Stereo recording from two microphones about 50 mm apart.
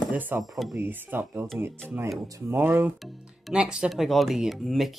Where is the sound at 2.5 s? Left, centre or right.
Right.